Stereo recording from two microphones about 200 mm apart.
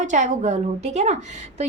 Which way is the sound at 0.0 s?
40° right (ahead or behind).